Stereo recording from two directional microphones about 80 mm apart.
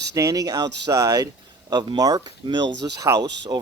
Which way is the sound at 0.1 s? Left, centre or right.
Right.